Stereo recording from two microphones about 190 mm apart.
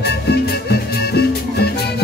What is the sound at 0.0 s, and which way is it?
Music, 60° left (ahead or behind).